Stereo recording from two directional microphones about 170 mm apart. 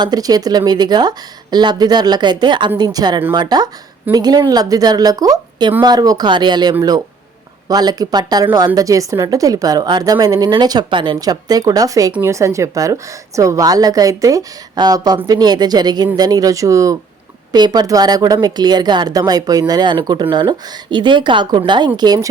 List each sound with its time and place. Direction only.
0.0 s a woman's voice: 20° right (ahead or behind)